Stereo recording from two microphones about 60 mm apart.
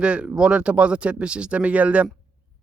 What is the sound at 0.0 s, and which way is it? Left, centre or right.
Speech, centre.